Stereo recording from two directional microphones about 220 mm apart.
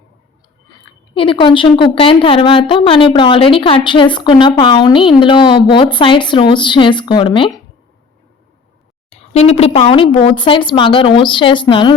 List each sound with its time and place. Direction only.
1.1 s a woman's voice: 25° left (ahead or behind)
9.0 s a woman's voice: 30° left (ahead or behind)